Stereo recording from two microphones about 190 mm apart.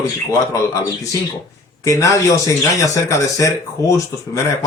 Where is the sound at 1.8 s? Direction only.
15° left (ahead or behind).